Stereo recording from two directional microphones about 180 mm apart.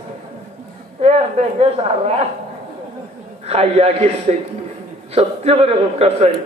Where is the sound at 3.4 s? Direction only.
35° right (ahead or behind).